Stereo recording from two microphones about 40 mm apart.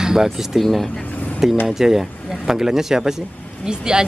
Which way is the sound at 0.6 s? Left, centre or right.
Centre.